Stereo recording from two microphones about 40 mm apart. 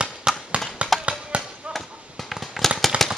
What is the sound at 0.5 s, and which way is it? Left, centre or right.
Tap, right.